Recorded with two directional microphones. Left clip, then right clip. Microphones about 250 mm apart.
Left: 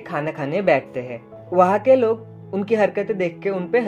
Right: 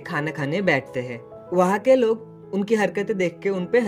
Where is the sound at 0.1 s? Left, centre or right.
Right.